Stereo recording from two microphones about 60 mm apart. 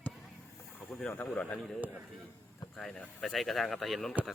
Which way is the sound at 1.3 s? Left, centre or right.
Centre.